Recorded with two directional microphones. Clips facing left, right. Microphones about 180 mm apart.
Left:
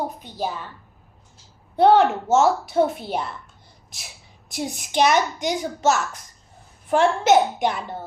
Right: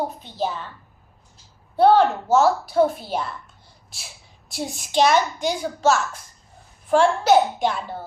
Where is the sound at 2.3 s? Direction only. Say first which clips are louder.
Even; 25° left (ahead or behind).